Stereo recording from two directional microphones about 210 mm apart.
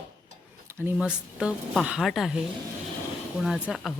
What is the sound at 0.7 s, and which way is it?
Speech, 10° right (ahead or behind).